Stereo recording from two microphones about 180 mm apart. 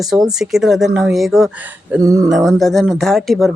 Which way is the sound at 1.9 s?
20° right (ahead or behind).